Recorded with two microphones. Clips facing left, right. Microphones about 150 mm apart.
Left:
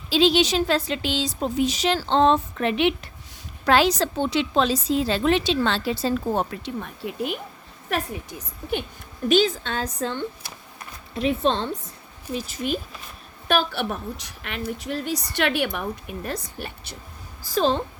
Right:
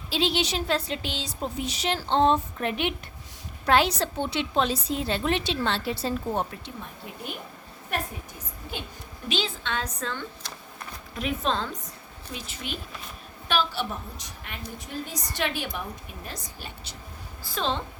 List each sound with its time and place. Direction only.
0.1 s a woman's voice: 90° left
9.3 s a woman's voice: 45° left (ahead or behind)
13.5 s a woman's voice: 55° left (ahead or behind)
17.4 s a woman's voice: 40° left (ahead or behind)